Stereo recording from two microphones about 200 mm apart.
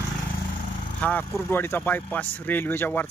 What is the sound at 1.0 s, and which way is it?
Speech, 10° left (ahead or behind).